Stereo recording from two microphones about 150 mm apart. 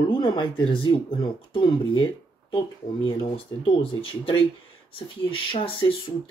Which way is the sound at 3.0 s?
35° left (ahead or behind).